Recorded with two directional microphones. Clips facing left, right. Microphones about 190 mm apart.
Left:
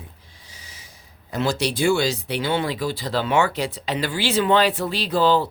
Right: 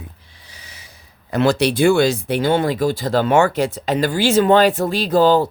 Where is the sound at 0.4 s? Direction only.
65° right (ahead or behind).